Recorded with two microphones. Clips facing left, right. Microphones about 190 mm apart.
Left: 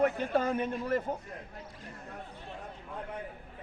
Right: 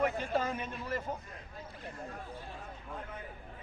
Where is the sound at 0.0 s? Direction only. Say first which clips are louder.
Left 4 dB; 55° left (ahead or behind).